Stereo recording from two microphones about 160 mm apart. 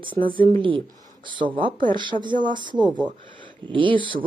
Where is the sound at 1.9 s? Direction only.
30° right (ahead or behind).